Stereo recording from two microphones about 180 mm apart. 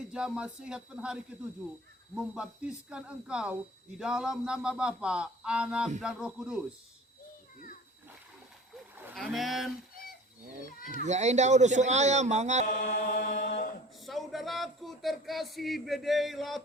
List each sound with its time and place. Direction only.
0.1 s speech: 5° right (ahead or behind)
9.1 s speech: centre (ahead or behind)
10.8 s a man's voice: 40° right (ahead or behind)
12.6 s chant: 50° left (ahead or behind)
14.0 s speech: centre (ahead or behind)